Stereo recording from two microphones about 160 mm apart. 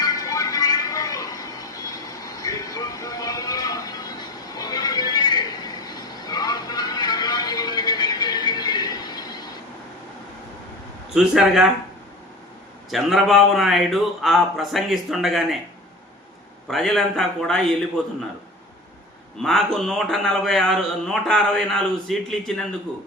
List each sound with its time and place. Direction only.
0.0 s music: 20° left (ahead or behind)
11.1 s a man's voice: 5° right (ahead or behind)
12.9 s a man's voice: centre (ahead or behind)
16.6 s a man's voice: 5° left (ahead or behind)
19.4 s a man's voice: centre (ahead or behind)